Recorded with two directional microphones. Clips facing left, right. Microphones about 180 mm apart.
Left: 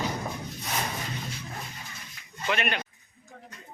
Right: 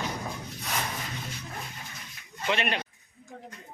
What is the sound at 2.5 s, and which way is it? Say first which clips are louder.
Speech: even; 30° right (ahead or behind).